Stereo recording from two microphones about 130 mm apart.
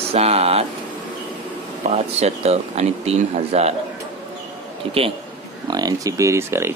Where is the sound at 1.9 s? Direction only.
55° right (ahead or behind).